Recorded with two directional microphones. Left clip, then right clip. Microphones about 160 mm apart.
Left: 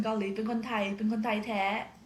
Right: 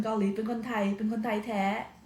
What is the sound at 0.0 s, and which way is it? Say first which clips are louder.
A woman's voice: right 1 dB; 25° left (ahead or behind).